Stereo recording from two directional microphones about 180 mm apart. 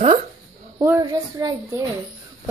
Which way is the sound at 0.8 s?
20° right (ahead or behind).